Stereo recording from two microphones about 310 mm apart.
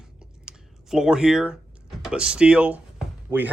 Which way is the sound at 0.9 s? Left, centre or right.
Centre.